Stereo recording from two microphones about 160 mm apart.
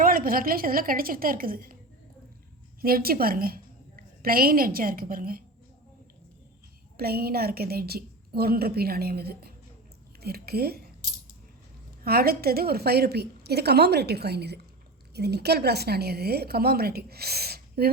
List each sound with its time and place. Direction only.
0.0 s a woman's voice: 65° right (ahead or behind)
2.8 s a woman's voice: 70° right (ahead or behind)
6.9 s a woman's voice: 75° right (ahead or behind)
12.0 s a woman's voice: 75° right (ahead or behind)